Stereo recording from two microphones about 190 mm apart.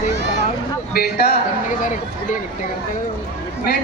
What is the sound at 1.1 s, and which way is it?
Speech, 60° left (ahead or behind).